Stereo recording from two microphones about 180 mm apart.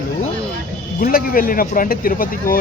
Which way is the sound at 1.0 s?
55° left (ahead or behind).